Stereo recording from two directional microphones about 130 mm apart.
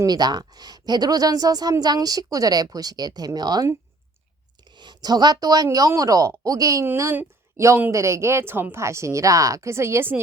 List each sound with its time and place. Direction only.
0.0 s a woman's voice: 30° right (ahead or behind)